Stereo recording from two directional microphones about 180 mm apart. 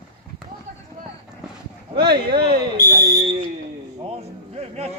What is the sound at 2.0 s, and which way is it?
Speech, 60° right (ahead or behind).